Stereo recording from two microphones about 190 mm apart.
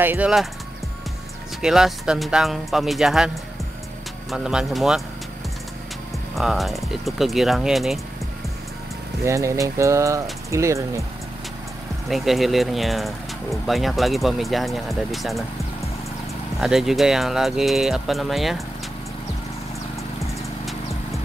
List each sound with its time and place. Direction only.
0.0 s speech: 10° right (ahead or behind)
1.6 s speech: centre (ahead or behind)
4.3 s speech: centre (ahead or behind)
6.3 s speech: centre (ahead or behind)
9.2 s speech: 15° right (ahead or behind)
12.1 s speech: centre (ahead or behind)
16.5 s speech: centre (ahead or behind)